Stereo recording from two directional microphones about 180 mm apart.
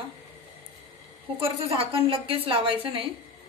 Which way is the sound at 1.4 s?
30° right (ahead or behind).